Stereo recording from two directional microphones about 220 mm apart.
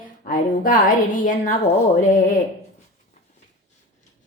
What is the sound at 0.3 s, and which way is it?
A woman's voice, 40° left (ahead or behind).